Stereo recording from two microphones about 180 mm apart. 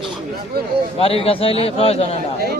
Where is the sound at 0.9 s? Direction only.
30° left (ahead or behind).